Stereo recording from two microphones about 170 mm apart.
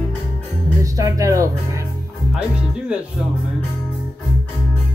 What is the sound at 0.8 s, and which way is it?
Speech, 20° right (ahead or behind).